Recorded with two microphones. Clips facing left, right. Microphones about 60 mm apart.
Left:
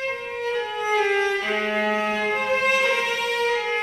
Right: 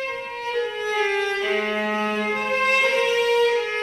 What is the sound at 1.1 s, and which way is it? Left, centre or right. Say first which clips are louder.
Music: even; left.